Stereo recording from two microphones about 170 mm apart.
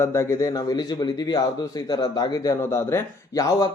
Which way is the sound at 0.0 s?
15° left (ahead or behind).